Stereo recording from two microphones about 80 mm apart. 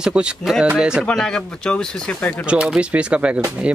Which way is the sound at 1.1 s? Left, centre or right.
Centre.